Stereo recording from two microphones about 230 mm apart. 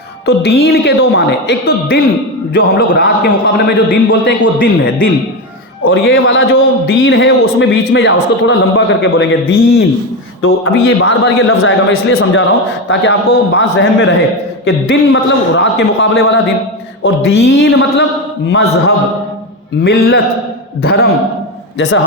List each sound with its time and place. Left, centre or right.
0.3 s a man's voice: left
5.9 s a man's voice: left
6.5 s a man's voice: left
11.4 s a man's voice: left
21.8 s a man's voice: left